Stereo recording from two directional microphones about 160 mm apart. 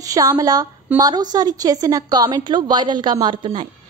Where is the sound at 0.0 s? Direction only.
20° right (ahead or behind).